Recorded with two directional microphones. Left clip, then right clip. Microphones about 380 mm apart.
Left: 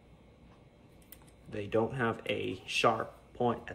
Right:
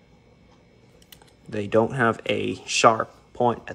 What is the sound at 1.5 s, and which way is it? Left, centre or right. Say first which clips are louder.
Speech: right 10 dB; centre.